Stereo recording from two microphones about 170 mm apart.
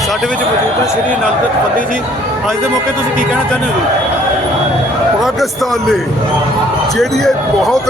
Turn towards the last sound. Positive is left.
turn(degrees=0)  # may be behind; listen again after turning